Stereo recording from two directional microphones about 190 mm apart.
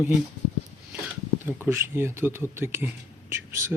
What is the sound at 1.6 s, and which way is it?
Speech, 15° right (ahead or behind).